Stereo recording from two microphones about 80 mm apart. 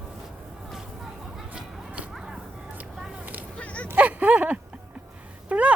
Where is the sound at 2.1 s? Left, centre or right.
Centre.